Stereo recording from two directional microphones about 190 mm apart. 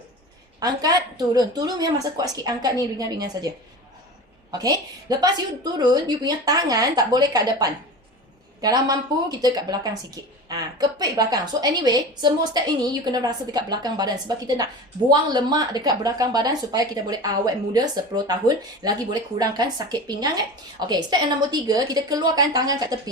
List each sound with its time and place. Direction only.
0.6 s speech: 20° right (ahead or behind)
4.5 s speech: 20° right (ahead or behind)